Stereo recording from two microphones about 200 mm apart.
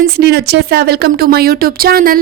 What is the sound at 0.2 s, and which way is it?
Speech, 55° right (ahead or behind).